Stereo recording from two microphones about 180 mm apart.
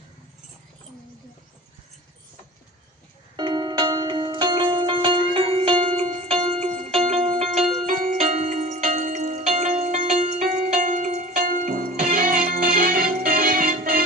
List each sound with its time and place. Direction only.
3.3 s music: 25° right (ahead or behind); by 14.0 s 50° right (ahead or behind)